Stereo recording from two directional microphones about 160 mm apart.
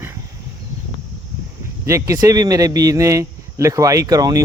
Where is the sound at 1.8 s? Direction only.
20° right (ahead or behind).